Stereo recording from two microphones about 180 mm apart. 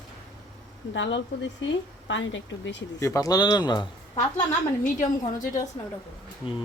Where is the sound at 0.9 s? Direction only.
90° left.